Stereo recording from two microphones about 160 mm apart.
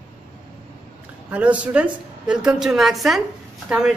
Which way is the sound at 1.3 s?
10° right (ahead or behind).